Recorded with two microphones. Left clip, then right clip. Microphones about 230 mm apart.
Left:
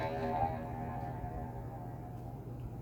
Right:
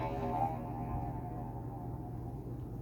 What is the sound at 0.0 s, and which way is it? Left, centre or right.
Music, left.